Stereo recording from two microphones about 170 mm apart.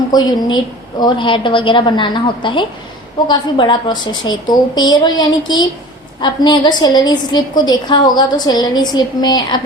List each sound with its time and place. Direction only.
0.1 s a woman's voice: 25° left (ahead or behind)